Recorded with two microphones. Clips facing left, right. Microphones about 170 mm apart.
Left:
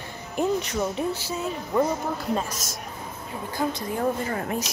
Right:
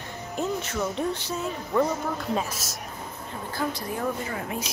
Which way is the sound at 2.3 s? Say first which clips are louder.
Left 1 dB; 5° right (ahead or behind).